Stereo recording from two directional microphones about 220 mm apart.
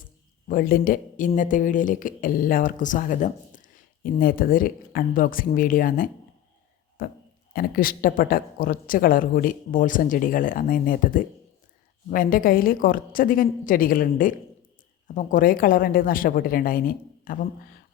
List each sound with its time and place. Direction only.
0.4 s a woman's voice: 40° left (ahead or behind)